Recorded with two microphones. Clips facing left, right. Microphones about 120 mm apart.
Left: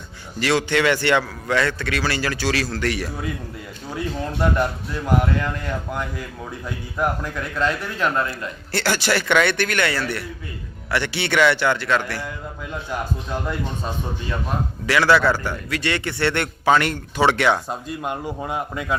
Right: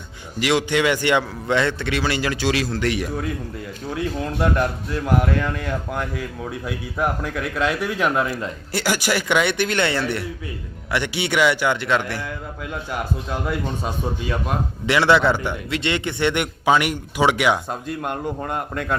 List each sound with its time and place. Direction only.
0.3 s a man's voice: 15° right (ahead or behind)
3.9 s a man's voice: centre (ahead or behind); by 12.2 s 20° right (ahead or behind)
13.5 s a man's voice: 10° right (ahead or behind)
14.8 s a man's voice: 20° right (ahead or behind)
17.7 s speech: centre (ahead or behind)